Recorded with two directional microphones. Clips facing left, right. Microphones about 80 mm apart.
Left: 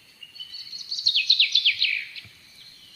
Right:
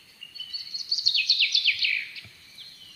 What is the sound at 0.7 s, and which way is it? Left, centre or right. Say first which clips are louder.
Bird vocalization: left 3 dB; centre.